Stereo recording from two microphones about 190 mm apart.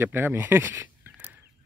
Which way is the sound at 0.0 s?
10° right (ahead or behind).